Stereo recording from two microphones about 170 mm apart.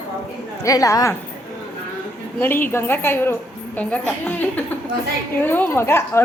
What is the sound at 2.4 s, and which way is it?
A woman's voice, 10° left (ahead or behind).